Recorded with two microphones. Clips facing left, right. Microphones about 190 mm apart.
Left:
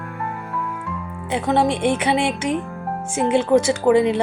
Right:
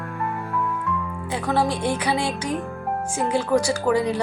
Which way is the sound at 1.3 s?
20° left (ahead or behind).